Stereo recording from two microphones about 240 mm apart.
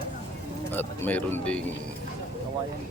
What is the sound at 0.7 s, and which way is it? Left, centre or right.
Speech, centre.